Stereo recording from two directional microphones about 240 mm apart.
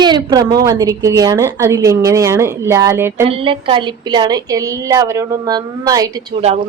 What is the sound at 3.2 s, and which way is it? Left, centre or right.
A woman's voice, right.